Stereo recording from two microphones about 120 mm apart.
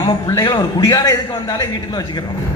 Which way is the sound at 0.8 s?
30° left (ahead or behind).